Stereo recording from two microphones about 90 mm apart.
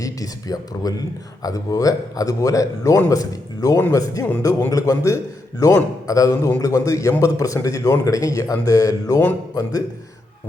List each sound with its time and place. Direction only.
0.0 s a man's voice: 40° left (ahead or behind)